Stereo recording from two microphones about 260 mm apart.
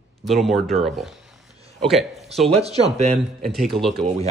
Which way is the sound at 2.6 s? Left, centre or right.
Right.